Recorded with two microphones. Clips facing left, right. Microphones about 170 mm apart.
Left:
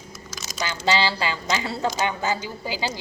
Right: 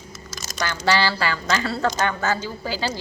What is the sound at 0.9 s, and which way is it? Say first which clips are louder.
A woman's voice: right 1 dB; 20° left (ahead or behind).